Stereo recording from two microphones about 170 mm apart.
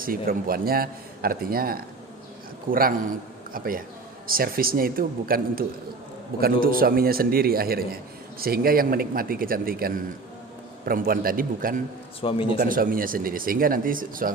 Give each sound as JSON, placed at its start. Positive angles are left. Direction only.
{"t": 0.0, "sound": "speech", "side_deg": -60}
{"t": 12.2, "sound": "speech", "side_deg": 35}
{"t": 12.5, "sound": "speech", "side_deg": -55}